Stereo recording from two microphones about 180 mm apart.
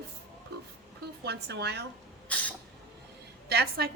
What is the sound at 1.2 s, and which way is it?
Speech, 70° right (ahead or behind).